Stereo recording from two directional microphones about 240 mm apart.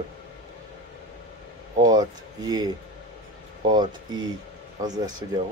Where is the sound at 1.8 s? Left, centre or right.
Centre.